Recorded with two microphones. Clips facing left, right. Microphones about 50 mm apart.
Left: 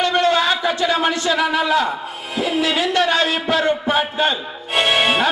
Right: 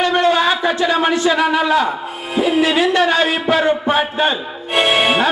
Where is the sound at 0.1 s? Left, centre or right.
Centre.